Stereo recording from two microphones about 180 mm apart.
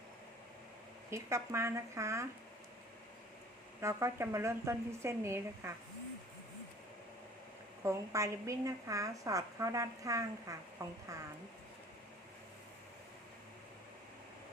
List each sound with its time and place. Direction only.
1.1 s a woman's voice: 15° right (ahead or behind)
3.8 s a woman's voice: 15° right (ahead or behind)
7.9 s a woman's voice: 15° right (ahead or behind)